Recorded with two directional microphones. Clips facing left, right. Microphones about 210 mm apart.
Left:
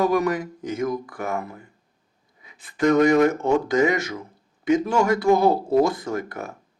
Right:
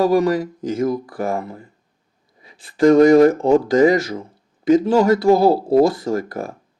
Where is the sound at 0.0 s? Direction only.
30° right (ahead or behind).